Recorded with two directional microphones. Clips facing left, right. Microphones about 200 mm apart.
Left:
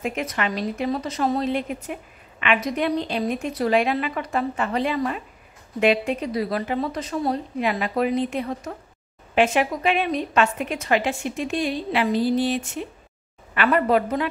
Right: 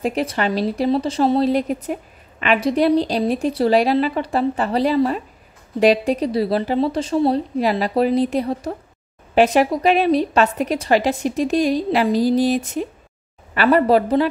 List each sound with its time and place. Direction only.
0.0 s a woman's voice: 35° right (ahead or behind)